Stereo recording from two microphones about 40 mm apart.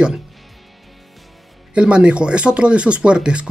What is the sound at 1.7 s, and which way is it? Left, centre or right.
Speech, right.